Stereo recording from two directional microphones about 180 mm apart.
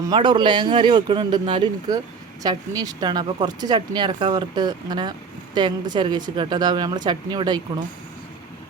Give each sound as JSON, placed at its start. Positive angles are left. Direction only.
{"t": 0.1, "sound": "speech", "side_deg": -25}